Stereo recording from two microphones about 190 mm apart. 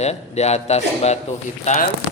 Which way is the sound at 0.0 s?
35° left (ahead or behind).